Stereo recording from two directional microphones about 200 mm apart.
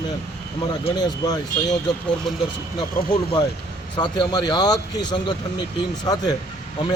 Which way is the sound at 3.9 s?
20° left (ahead or behind).